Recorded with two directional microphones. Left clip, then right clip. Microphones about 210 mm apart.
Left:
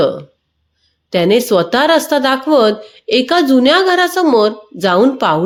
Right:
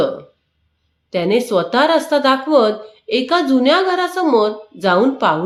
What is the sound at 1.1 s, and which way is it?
Speech, 40° left (ahead or behind).